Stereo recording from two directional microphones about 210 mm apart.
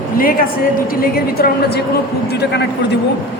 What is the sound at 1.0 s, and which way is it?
A woman's voice, 45° left (ahead or behind).